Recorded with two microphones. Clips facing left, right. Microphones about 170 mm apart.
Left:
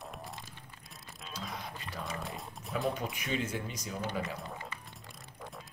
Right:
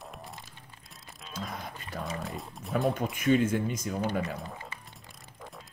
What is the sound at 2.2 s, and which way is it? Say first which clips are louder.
Pigeon: right 3 dB; centre (ahead or behind).